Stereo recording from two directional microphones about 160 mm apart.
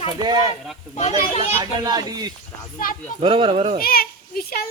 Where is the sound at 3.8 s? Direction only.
70° left (ahead or behind).